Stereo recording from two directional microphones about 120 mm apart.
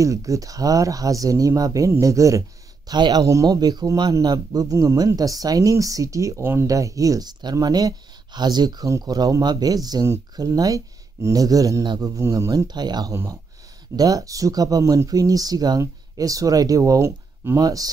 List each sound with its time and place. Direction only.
0.0 s speech: 25° right (ahead or behind)
13.1 s speech: 25° right (ahead or behind)